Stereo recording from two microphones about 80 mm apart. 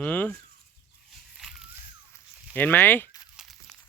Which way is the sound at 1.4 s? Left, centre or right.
Centre.